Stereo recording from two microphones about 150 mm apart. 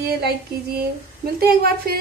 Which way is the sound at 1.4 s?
90° right.